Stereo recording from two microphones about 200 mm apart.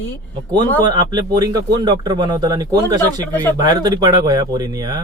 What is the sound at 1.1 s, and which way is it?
Speech, 20° right (ahead or behind).